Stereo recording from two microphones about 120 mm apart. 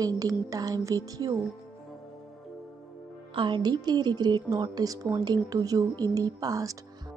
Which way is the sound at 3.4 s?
40° right (ahead or behind).